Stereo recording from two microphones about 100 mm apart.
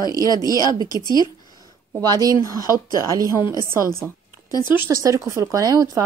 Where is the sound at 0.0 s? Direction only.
40° left (ahead or behind).